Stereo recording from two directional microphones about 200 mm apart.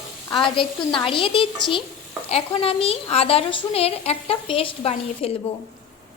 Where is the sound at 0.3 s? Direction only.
25° left (ahead or behind).